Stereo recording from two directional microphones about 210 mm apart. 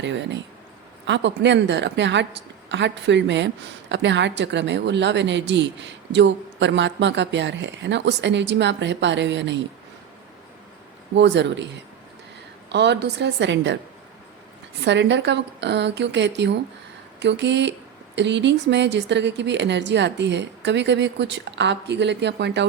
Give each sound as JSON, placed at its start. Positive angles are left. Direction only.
{"t": 0.0, "sound": "speech", "side_deg": -60}
{"t": 11.2, "sound": "speech", "side_deg": -55}
{"t": 14.8, "sound": "speech", "side_deg": -55}